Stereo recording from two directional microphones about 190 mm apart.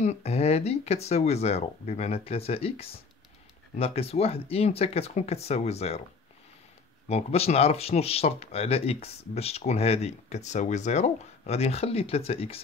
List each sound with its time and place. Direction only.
0.0 s speech: 35° left (ahead or behind)
7.1 s speech: 35° left (ahead or behind)